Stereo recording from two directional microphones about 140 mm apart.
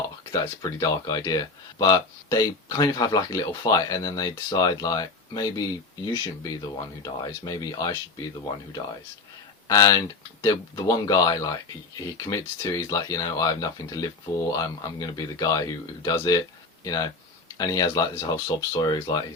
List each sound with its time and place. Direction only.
0.3 s speech: 25° left (ahead or behind)
9.6 s speech: 25° left (ahead or behind)